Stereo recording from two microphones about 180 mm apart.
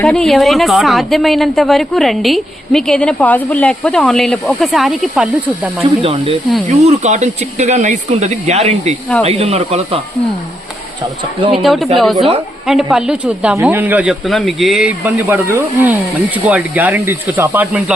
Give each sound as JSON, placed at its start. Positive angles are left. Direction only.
{"t": 0.0, "sound": "a woman's voice", "side_deg": 5}
{"t": 5.8, "sound": "speech", "side_deg": -30}
{"t": 11.0, "sound": "speech", "side_deg": -30}
{"t": 11.5, "sound": "a woman's voice", "side_deg": 0}